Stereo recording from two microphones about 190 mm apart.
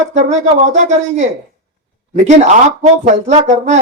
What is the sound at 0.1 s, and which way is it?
Speech, 35° right (ahead or behind).